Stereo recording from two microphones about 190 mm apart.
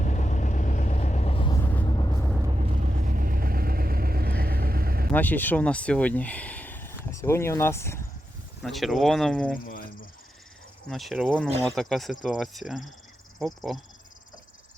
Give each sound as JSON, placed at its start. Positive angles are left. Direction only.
{"t": 0.0, "sound": "vehicle", "side_deg": 40}
{"t": 2.5, "sound": "vehicle", "side_deg": -35}
{"t": 5.1, "sound": "speech", "side_deg": 10}
{"t": 8.6, "sound": "speech", "side_deg": 0}
{"t": 9.6, "sound": "cricket", "side_deg": 45}
{"t": 10.8, "sound": "speech", "side_deg": 0}